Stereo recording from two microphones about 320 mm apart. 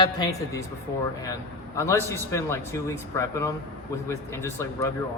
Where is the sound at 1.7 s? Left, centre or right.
Centre.